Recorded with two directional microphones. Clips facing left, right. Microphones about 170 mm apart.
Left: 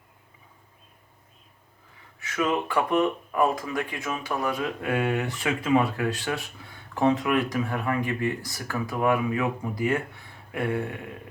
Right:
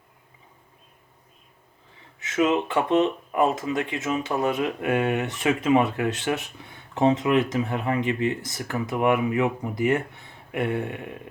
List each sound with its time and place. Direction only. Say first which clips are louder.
2.1 s speech: right 4 dB; 20° right (ahead or behind)